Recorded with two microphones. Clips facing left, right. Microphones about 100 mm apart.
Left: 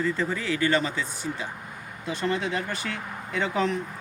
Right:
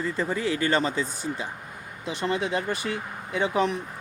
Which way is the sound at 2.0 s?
20° right (ahead or behind).